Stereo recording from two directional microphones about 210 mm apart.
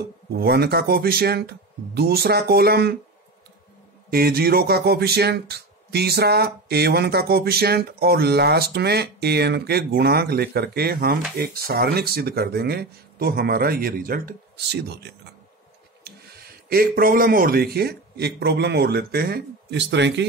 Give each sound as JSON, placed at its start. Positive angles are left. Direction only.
{"t": 0.3, "sound": "speech", "side_deg": -50}
{"t": 4.1, "sound": "speech", "side_deg": -45}
{"t": 16.1, "sound": "a sound", "side_deg": -50}
{"t": 16.6, "sound": "speech", "side_deg": -45}